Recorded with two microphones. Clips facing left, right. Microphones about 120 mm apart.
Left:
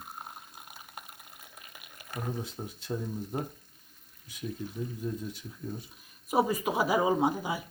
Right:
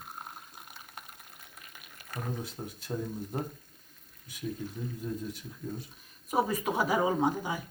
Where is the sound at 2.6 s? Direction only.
10° left (ahead or behind).